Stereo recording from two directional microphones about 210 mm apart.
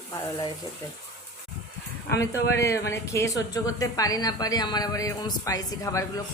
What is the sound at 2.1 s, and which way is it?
Speech, 15° left (ahead or behind).